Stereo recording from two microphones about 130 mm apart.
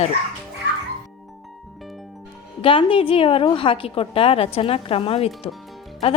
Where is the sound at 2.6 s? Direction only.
40° left (ahead or behind).